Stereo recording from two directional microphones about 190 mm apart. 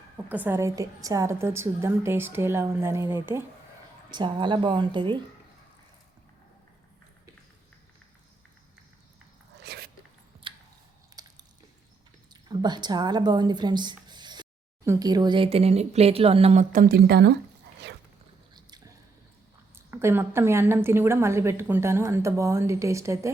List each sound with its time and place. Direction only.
0.3 s a woman's voice: 10° right (ahead or behind)
4.1 s a woman's voice: 25° right (ahead or behind)
9.6 s dog: 55° right (ahead or behind)
11.1 s biting: 20° right (ahead or behind)
12.3 s a woman's voice: 20° right (ahead or behind); by 17.3 s 60° right (ahead or behind)
19.7 s a woman's voice: 10° right (ahead or behind)